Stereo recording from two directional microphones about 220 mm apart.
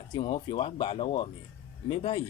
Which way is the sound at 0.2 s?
25° left (ahead or behind).